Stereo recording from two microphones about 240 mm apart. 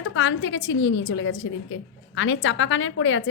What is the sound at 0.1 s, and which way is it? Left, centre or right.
A woman's voice, left.